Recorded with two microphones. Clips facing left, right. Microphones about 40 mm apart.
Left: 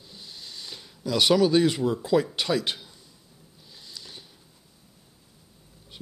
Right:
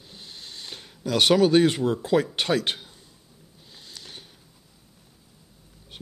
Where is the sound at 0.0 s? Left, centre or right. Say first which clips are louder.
Right 1 dB; right.